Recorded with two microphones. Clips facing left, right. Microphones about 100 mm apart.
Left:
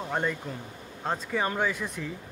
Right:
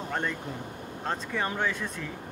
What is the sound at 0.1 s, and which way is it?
Speech, 10° left (ahead or behind).